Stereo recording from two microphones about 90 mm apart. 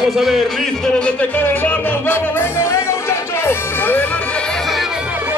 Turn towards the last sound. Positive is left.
turn(degrees=25)  # may be behind; listen again after turning